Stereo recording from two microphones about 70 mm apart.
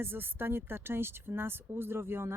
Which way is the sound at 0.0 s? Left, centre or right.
Right.